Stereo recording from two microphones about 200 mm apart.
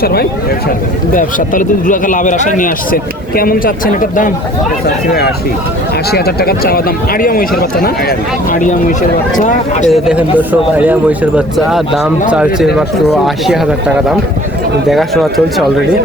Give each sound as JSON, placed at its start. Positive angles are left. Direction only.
{"t": 0.0, "sound": "speech", "side_deg": 50}
{"t": 6.1, "sound": "speech", "side_deg": 50}
{"t": 9.9, "sound": "speech", "side_deg": -5}